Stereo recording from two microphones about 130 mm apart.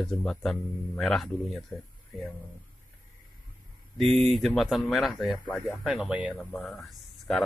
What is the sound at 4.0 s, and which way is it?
Speech, centre (ahead or behind).